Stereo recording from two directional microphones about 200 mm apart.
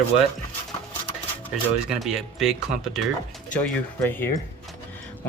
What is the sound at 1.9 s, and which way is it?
Speech, centre (ahead or behind).